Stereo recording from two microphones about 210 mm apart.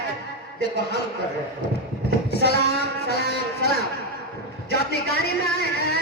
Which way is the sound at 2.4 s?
50° left (ahead or behind).